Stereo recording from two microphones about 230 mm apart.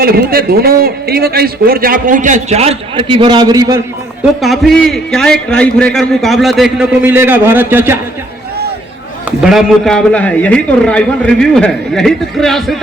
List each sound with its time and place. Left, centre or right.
0.0 s a man's voice: right; by 3.8 s centre
4.4 s a man's voice: centre
9.4 s a man's voice: centre